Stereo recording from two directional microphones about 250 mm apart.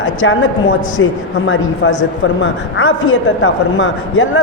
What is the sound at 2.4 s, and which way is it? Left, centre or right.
A woman's voice, left.